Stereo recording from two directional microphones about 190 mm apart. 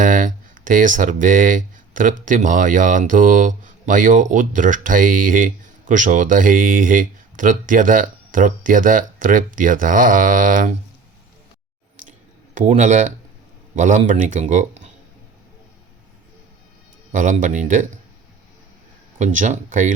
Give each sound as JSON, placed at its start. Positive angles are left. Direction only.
{"t": 0.0, "sound": "speech", "side_deg": -45}
{"t": 12.5, "sound": "speech", "side_deg": -40}
{"t": 17.1, "sound": "speech", "side_deg": -40}
{"t": 19.2, "sound": "speech", "side_deg": -40}